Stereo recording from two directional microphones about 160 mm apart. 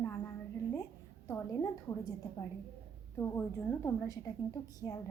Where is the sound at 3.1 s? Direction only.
10° left (ahead or behind).